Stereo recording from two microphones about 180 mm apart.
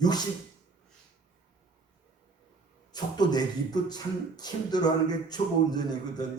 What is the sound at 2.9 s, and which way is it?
Speech, 20° left (ahead or behind).